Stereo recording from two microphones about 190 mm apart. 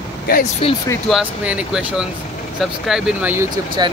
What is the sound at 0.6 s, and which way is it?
Speech, 30° left (ahead or behind).